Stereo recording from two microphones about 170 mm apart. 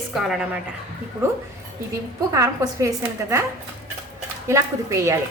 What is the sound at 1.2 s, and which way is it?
A woman's voice, 15° right (ahead or behind).